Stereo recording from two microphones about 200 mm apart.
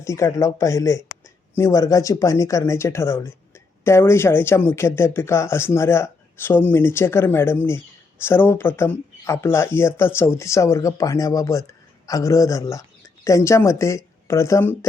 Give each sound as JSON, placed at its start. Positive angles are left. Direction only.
{"t": 0.0, "sound": "speech", "side_deg": 15}